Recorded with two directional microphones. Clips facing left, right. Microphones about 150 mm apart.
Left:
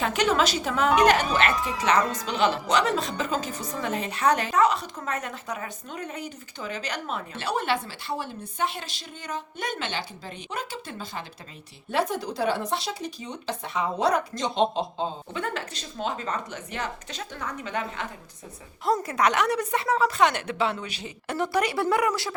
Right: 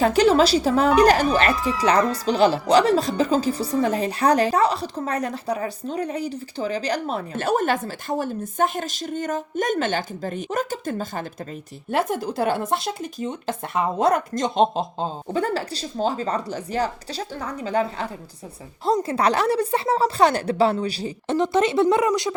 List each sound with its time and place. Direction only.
0.0 s speech: 35° right (ahead or behind)
21.3 s speech: 20° right (ahead or behind)